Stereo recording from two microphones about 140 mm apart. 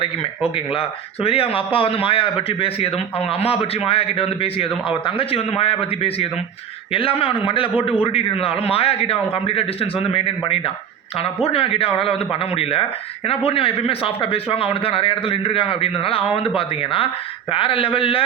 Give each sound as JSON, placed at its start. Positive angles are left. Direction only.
{"t": 0.0, "sound": "speech", "side_deg": 40}